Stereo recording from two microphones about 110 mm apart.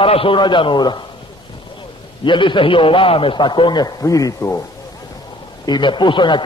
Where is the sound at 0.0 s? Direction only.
55° left (ahead or behind).